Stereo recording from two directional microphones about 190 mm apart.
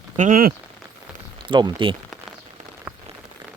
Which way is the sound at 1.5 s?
25° right (ahead or behind).